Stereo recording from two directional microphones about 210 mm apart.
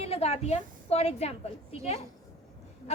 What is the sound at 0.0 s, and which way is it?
A woman's voice, 30° left (ahead or behind).